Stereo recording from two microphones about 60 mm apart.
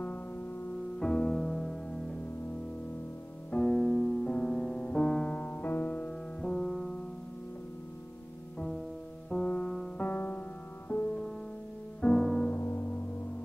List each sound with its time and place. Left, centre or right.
0.9 s music: centre
3.6 s music: centre
5.4 s music: left
6.4 s music: centre
8.5 s music: centre
9.9 s music: left
12.0 s music: centre
12.5 s music: left
12.8 s gong: left